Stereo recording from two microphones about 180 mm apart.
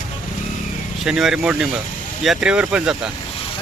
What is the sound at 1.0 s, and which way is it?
Speech, centre (ahead or behind).